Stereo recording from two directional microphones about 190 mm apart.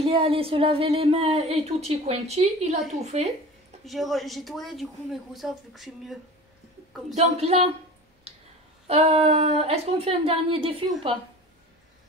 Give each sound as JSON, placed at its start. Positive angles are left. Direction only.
{"t": 0.0, "sound": "speech", "side_deg": -30}
{"t": 3.8, "sound": "speech", "side_deg": 0}
{"t": 7.2, "sound": "speech", "side_deg": -35}
{"t": 8.8, "sound": "speech", "side_deg": -35}